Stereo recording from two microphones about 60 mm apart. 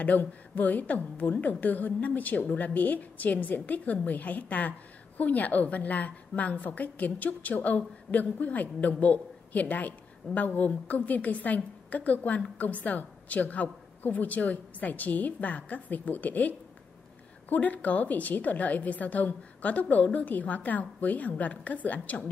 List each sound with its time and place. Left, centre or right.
0.0 s a woman's voice: left